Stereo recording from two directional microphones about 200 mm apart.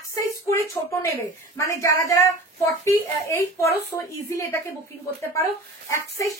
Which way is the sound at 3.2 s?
15° left (ahead or behind).